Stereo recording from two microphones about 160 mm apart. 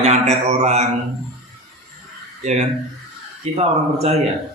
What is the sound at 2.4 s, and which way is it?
Speech, 45° right (ahead or behind).